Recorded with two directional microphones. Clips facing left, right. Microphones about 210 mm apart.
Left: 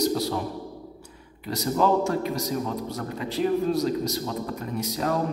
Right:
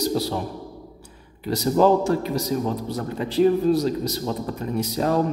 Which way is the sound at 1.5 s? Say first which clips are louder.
Right 5 dB; 30° right (ahead or behind).